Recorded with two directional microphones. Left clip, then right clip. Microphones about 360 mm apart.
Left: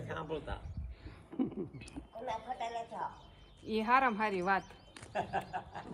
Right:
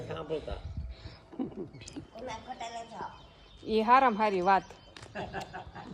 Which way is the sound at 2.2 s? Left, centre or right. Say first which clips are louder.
Left 2 dB; centre.